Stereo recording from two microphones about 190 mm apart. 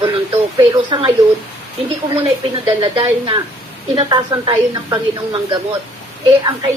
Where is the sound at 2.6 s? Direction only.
25° right (ahead or behind).